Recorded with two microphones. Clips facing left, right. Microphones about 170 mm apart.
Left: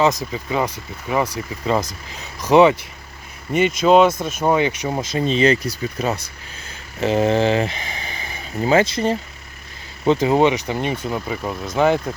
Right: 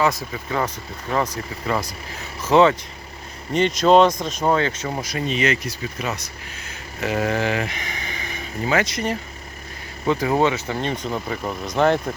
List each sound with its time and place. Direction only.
0.5 s speech: 10° left (ahead or behind)
1.6 s speech: 20° left (ahead or behind); by 12.1 s 5° left (ahead or behind)